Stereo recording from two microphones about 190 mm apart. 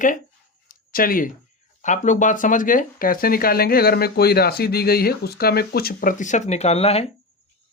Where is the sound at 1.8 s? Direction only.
40° left (ahead or behind).